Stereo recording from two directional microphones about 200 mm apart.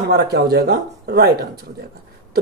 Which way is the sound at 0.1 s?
55° right (ahead or behind).